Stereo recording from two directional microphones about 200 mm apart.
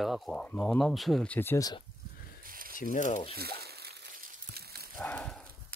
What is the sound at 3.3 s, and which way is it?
Crumpling, 50° right (ahead or behind).